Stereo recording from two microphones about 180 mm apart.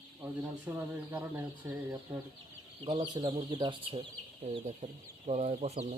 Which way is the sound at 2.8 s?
30° right (ahead or behind).